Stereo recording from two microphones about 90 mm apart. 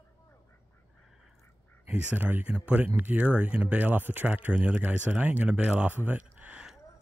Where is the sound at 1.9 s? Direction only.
15° right (ahead or behind).